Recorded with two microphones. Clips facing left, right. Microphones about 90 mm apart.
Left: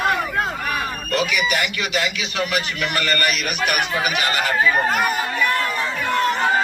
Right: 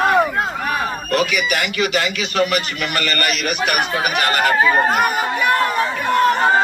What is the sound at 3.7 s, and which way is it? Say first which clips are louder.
Speech: right 1 dB; 45° right (ahead or behind).